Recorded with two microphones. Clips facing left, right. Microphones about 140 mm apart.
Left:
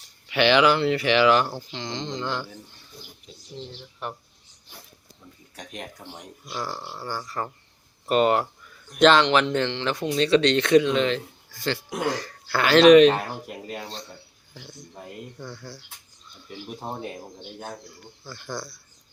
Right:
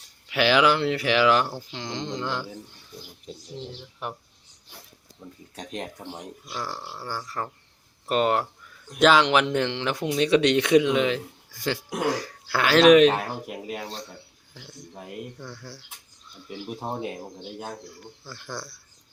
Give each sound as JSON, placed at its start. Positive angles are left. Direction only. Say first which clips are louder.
{"t": 0.3, "sound": "speech", "louder": "left 2 dB", "side_deg": 0}
{"t": 3.5, "sound": "speech", "louder": "left 1 dB", "side_deg": -10}
{"t": 5.5, "sound": "speech", "louder": "right 4 dB", "side_deg": -25}
{"t": 6.4, "sound": "speech", "louder": "left 3 dB", "side_deg": 0}